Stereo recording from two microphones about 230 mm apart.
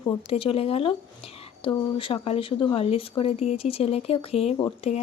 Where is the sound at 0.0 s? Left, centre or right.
Left.